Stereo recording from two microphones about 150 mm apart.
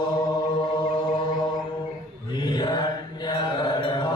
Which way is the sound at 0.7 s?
30° left (ahead or behind).